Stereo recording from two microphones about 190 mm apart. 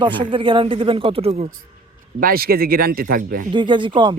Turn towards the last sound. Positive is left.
turn(degrees=-25)  # may be behind; listen again after turning